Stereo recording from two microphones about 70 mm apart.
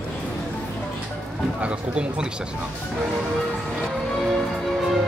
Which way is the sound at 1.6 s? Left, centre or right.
Centre.